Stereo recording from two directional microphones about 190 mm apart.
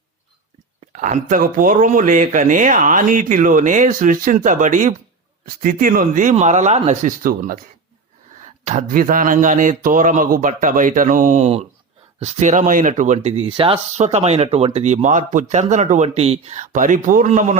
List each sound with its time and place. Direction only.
0.9 s speech: 40° right (ahead or behind)